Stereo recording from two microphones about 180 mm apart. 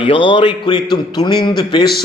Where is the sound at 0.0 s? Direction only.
30° left (ahead or behind).